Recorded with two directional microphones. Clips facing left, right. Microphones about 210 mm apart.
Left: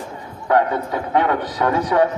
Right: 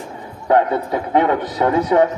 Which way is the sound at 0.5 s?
25° right (ahead or behind).